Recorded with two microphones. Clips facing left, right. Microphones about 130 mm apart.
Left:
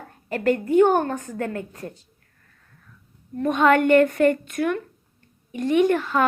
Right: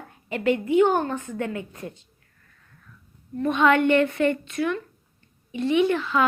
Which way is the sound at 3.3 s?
50° left (ahead or behind).